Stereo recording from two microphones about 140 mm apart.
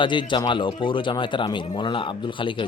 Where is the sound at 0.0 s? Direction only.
35° left (ahead or behind).